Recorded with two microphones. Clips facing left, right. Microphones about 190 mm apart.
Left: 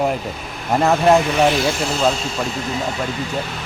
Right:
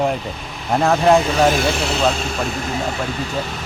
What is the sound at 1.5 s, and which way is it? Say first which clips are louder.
Speech: even; 65° right (ahead or behind).